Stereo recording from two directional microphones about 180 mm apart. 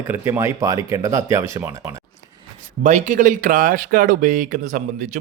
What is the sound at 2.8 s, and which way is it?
Speech, 40° right (ahead or behind).